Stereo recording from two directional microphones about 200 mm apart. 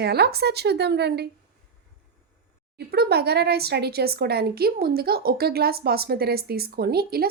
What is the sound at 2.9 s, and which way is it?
Speech, 55° right (ahead or behind).